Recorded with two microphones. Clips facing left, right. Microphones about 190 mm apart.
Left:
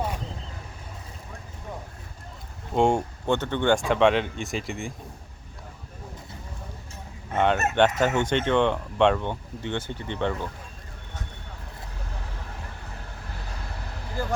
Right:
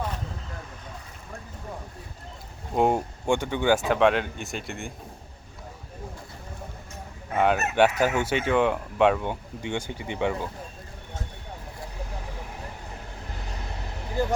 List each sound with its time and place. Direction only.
2.7 s speech: 5° right (ahead or behind)
7.3 s speech: 5° right (ahead or behind)
14.1 s speech: 20° right (ahead or behind)